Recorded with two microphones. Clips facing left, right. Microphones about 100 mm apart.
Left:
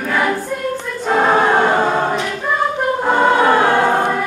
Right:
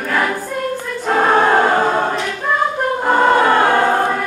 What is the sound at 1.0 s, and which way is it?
Choir, centre (ahead or behind).